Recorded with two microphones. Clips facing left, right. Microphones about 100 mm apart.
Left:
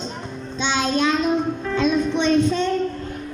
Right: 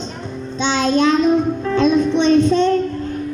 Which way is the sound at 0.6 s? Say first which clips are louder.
Right 5 dB; 5° left (ahead or behind).